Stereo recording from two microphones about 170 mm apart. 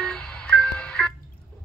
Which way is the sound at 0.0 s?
5° left (ahead or behind).